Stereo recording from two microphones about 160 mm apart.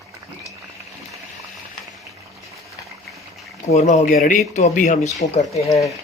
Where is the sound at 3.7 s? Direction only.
45° left (ahead or behind).